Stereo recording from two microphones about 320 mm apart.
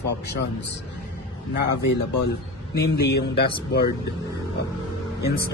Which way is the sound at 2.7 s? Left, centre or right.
Left.